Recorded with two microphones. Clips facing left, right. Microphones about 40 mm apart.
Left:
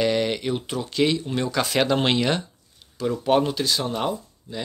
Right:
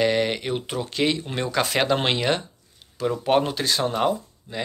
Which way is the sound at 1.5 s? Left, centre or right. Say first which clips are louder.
Right 1 dB; centre.